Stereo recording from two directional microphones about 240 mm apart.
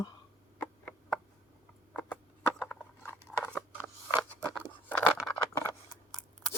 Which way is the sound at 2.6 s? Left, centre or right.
Centre.